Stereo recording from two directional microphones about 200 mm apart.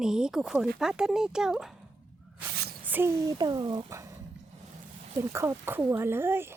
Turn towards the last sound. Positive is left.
turn(degrees=-10)  # may be behind; listen again after turning